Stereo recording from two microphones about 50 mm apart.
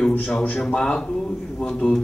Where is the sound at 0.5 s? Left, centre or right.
Centre.